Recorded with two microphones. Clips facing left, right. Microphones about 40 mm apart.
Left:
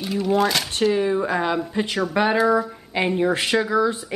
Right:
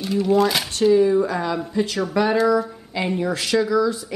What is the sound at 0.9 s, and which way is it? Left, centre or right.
A woman's voice, left.